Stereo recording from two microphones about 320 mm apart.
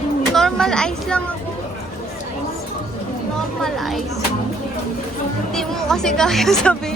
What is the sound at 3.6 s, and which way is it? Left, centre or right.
Speech, centre.